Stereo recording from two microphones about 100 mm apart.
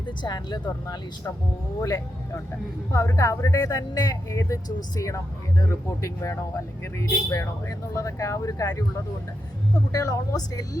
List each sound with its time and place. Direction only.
0.2 s speech: 45° left (ahead or behind)
9.9 s speech: 40° left (ahead or behind)